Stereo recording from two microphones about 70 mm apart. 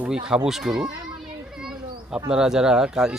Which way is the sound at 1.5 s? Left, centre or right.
Centre.